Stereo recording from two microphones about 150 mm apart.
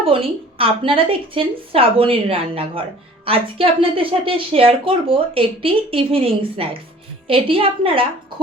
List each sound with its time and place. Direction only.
0.0 s a woman's voice: 40° right (ahead or behind)